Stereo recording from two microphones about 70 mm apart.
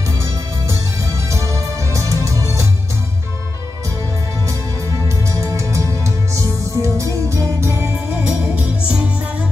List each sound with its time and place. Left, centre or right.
1.3 s music: right
5.0 s music: right
8.1 s music: centre